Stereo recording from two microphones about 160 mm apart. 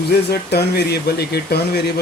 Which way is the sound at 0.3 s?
85° left.